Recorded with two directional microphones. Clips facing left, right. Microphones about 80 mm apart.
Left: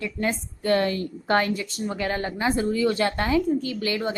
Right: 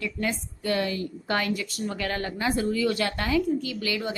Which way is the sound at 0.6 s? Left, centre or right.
Left.